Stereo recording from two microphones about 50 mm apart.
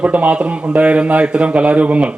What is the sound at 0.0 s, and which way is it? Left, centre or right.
A man's voice, right.